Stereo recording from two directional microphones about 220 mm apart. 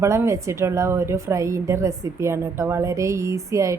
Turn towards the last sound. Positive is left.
turn(degrees=-15)  # may be behind; listen again after turning